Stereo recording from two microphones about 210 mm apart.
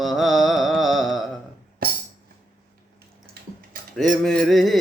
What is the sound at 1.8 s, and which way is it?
Music, 45° right (ahead or behind).